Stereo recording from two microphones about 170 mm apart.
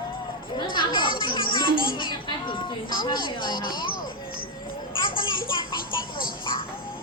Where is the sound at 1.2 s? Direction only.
25° left (ahead or behind).